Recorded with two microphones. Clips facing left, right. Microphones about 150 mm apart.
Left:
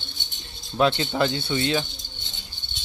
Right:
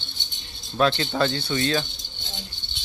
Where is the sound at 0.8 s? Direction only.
20° left (ahead or behind).